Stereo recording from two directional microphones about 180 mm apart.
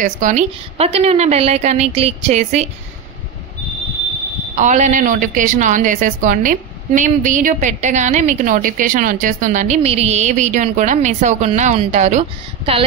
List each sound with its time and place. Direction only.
0.0 s a woman's voice: 45° right (ahead or behind)
4.6 s speech: 40° right (ahead or behind)